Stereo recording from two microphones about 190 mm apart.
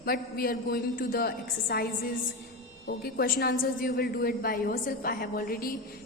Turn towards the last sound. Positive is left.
turn(degrees=50)  # may be behind; listen again after turning